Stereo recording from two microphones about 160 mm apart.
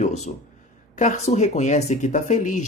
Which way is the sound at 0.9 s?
50° left (ahead or behind).